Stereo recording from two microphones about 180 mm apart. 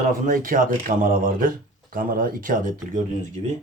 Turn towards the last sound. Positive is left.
turn(degrees=-40)  # may be behind; listen again after turning